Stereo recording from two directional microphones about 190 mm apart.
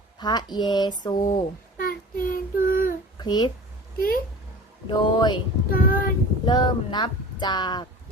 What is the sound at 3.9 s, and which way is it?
Speech, 50° left (ahead or behind).